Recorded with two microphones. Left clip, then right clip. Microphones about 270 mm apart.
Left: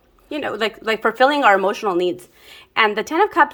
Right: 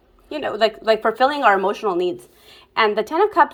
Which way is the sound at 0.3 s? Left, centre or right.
Centre.